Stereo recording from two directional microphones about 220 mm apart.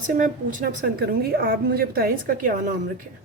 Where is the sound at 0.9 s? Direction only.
45° right (ahead or behind).